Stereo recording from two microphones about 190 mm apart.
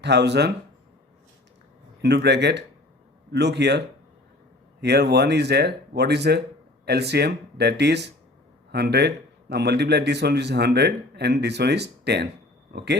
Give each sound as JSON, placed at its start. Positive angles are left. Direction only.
{"t": 0.0, "sound": "a man's voice", "side_deg": -65}
{"t": 2.0, "sound": "a man's voice", "side_deg": -60}